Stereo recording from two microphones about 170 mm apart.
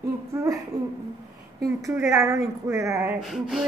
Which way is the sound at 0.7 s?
20° right (ahead or behind).